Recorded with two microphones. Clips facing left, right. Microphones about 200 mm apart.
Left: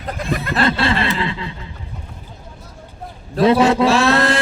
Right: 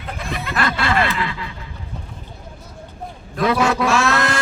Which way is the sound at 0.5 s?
30° left (ahead or behind).